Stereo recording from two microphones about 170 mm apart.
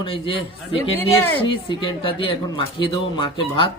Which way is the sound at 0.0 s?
30° left (ahead or behind).